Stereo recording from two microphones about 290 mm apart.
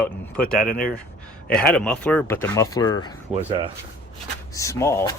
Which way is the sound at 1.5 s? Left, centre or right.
Centre.